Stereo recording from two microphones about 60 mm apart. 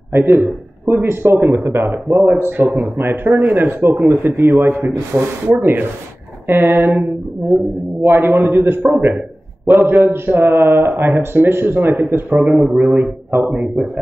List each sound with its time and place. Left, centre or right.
0.1 s a man's voice: right
3.0 s a man's voice: right